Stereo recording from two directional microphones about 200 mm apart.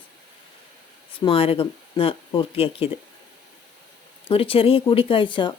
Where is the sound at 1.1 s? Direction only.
25° left (ahead or behind).